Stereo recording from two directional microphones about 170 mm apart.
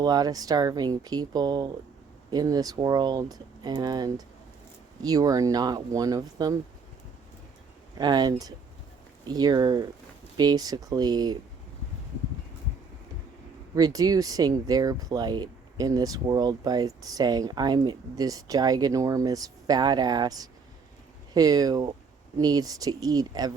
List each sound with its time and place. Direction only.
0.0 s speech: 25° right (ahead or behind)
7.9 s speech: 25° right (ahead or behind)
13.7 s speech: 20° right (ahead or behind)